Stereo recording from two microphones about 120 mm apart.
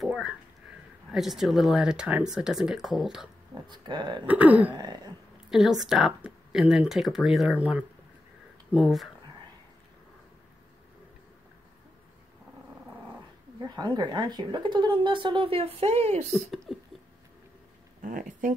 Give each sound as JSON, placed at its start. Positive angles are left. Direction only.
{"t": 0.0, "sound": "speech", "side_deg": -5}
{"t": 3.6, "sound": "speech", "side_deg": -40}
{"t": 4.3, "sound": "throat clearing", "side_deg": -15}
{"t": 4.7, "sound": "a sound", "side_deg": -35}
{"t": 5.5, "sound": "speech", "side_deg": -5}
{"t": 13.6, "sound": "speech", "side_deg": -35}
{"t": 16.3, "sound": "speech", "side_deg": 5}